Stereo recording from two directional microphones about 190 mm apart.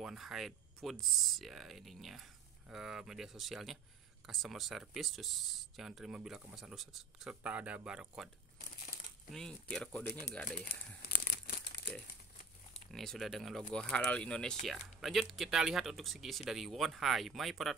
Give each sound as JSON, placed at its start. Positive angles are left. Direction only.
{"t": 0.0, "sound": "speech", "side_deg": 0}
{"t": 9.3, "sound": "speech", "side_deg": 5}
{"t": 11.1, "sound": "crumpling", "side_deg": 50}
{"t": 12.9, "sound": "speech", "side_deg": 0}